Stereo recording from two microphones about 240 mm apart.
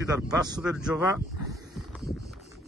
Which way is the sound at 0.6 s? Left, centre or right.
Centre.